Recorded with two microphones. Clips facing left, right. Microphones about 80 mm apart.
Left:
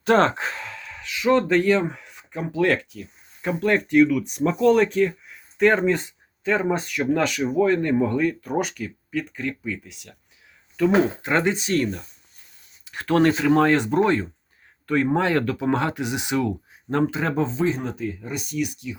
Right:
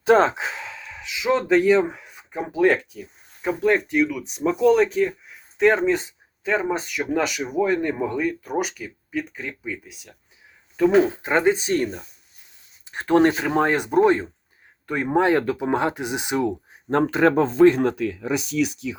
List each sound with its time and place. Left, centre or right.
0.0 s speech: centre
3.5 s speech: centre
12.8 s speech: right
16.9 s speech: right